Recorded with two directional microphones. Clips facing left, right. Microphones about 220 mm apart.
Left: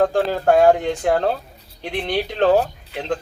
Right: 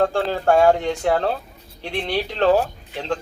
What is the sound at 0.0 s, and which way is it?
Speech, 15° left (ahead or behind).